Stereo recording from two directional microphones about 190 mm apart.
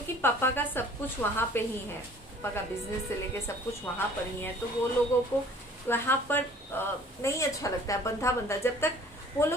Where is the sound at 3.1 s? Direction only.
15° left (ahead or behind).